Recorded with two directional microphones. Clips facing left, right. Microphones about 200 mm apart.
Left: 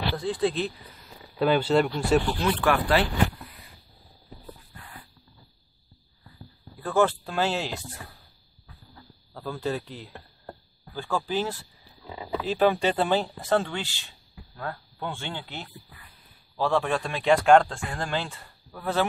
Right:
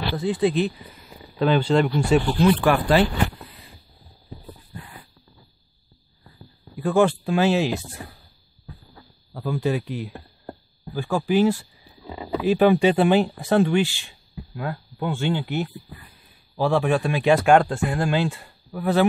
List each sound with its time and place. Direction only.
0.1 s speech: 5° right (ahead or behind)
1.3 s speech: 5° left (ahead or behind)
2.4 s speech: 15° right (ahead or behind)
6.8 s speech: 15° right (ahead or behind)
9.3 s speech: 15° right (ahead or behind)
14.3 s a sound: 15° right (ahead or behind)
16.5 s speech: 10° right (ahead or behind)